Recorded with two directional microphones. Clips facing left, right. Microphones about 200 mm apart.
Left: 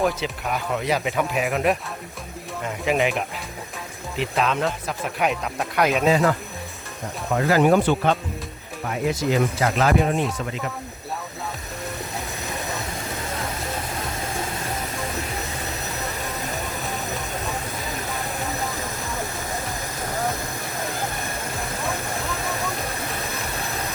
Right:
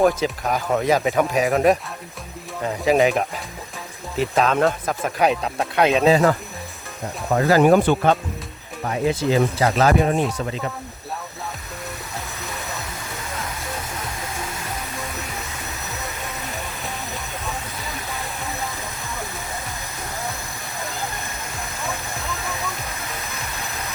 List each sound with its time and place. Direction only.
0.0 s speech: 45° right (ahead or behind)
2.8 s speech: 35° right (ahead or behind)
5.2 s speech: 30° right (ahead or behind)
7.4 s speech: 45° right (ahead or behind)
9.0 s speech: 30° right (ahead or behind)